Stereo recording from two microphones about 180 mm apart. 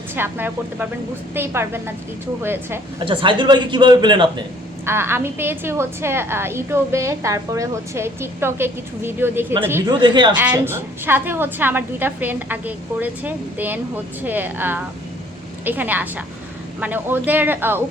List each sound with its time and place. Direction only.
0.2 s a woman's voice: 10° right (ahead or behind)
3.0 s a man's voice: 30° right (ahead or behind)
4.9 s a woman's voice: 15° right (ahead or behind)
10.0 s a man's voice: 25° right (ahead or behind)
10.5 s a woman's voice: 10° right (ahead or behind)